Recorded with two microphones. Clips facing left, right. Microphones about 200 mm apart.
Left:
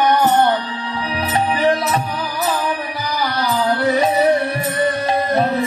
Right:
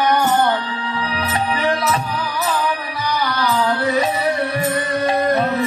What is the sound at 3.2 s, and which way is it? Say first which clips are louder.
Music: left 1 dB; 30° left (ahead or behind).